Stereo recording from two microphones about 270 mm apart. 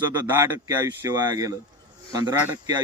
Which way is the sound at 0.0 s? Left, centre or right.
Centre.